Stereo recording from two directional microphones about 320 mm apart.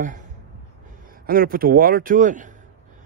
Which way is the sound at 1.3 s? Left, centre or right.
Right.